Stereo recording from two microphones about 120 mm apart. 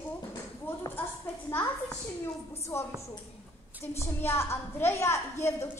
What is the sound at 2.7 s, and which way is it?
Speech, 20° left (ahead or behind).